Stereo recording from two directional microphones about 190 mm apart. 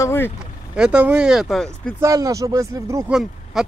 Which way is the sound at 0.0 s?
10° left (ahead or behind).